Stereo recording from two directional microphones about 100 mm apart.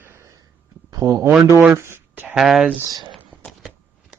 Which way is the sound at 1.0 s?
35° right (ahead or behind).